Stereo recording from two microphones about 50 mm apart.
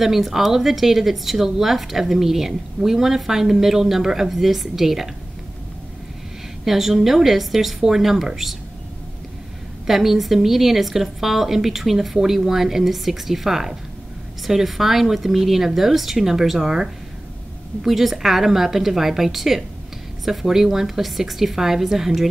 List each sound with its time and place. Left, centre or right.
0.0 s a woman's voice: centre
6.6 s a woman's voice: centre
9.8 s a woman's voice: centre